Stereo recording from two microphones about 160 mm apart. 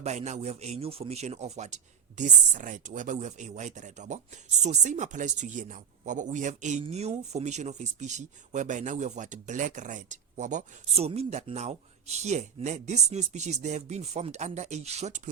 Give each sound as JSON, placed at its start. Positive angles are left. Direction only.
{"t": 0.0, "sound": "speech", "side_deg": -45}